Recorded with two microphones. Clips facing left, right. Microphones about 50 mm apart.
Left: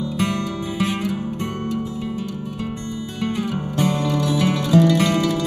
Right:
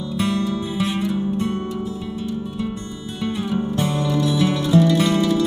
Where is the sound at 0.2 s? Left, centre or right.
Left.